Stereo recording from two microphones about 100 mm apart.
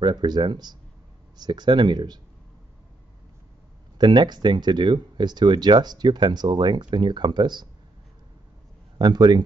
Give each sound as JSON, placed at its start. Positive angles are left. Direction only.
{"t": 0.0, "sound": "speech", "side_deg": -50}
{"t": 4.0, "sound": "speech", "side_deg": -45}
{"t": 8.9, "sound": "speech", "side_deg": -45}